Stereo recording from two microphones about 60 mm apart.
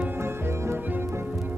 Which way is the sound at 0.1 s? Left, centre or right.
Right.